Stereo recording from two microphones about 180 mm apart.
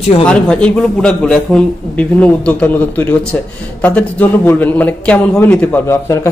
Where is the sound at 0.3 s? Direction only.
5° left (ahead or behind).